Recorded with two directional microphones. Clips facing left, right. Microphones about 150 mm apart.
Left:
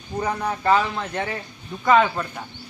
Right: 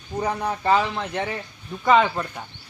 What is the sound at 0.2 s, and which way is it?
A man's voice, 15° right (ahead or behind).